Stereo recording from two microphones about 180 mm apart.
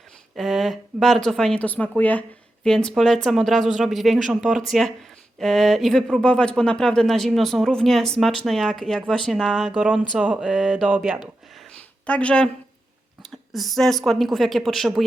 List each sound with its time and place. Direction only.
0.3 s speech: centre (ahead or behind)
9.7 s speech: 10° right (ahead or behind)
12.0 s speech: 5° left (ahead or behind)